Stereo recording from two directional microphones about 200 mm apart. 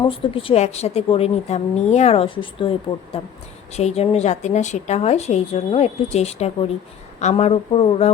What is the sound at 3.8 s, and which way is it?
A woman's voice, 30° left (ahead or behind).